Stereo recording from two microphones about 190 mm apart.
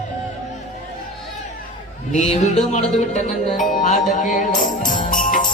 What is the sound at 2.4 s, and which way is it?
Music, 35° left (ahead or behind).